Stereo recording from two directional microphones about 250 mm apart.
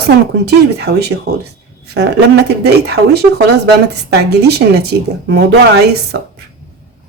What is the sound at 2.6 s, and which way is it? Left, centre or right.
A woman's voice, right.